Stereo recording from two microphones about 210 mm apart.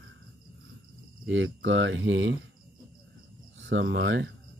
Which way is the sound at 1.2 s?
60° right (ahead or behind).